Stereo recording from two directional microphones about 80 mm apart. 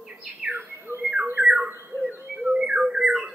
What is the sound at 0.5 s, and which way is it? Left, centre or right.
Bird, right.